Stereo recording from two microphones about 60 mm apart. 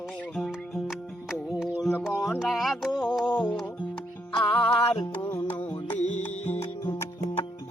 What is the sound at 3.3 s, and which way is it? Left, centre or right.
Music, left.